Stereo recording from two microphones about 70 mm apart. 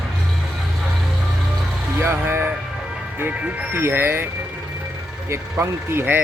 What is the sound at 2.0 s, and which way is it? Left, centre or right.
Speech, right.